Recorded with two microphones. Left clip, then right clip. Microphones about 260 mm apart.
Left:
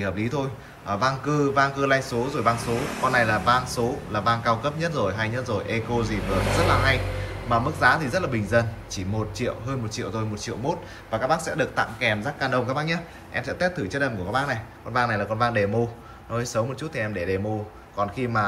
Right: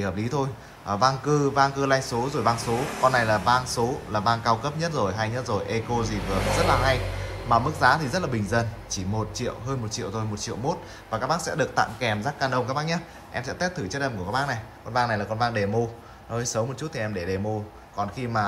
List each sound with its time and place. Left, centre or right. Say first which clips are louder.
0.0 s speech: even; centre
7.4 s speech: even; centre